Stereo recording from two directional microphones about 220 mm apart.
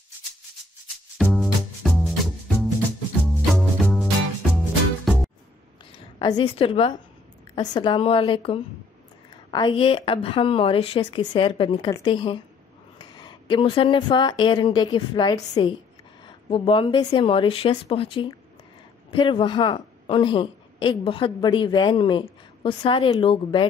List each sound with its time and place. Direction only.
1.1 s music: centre (ahead or behind)
6.1 s a woman's voice: 20° left (ahead or behind)